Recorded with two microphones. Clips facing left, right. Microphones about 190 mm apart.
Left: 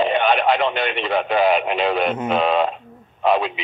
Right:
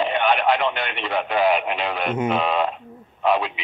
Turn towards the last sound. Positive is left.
turn(degrees=25)  # may be behind; listen again after turning